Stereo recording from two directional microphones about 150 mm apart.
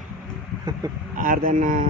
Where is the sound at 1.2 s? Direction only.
65° right (ahead or behind).